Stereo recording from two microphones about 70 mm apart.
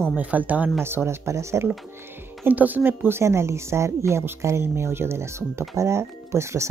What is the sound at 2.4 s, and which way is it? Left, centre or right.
Speech, right.